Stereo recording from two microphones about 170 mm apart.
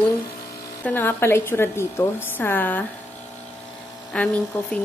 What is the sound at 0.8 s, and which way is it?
A woman's voice, 10° left (ahead or behind).